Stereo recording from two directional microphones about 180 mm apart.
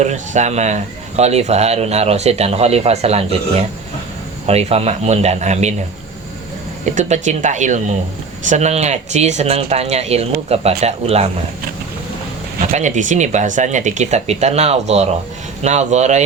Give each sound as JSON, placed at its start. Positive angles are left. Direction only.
{"t": 0.0, "sound": "speech", "side_deg": -40}
{"t": 6.8, "sound": "speech", "side_deg": -40}
{"t": 12.7, "sound": "speech", "side_deg": -45}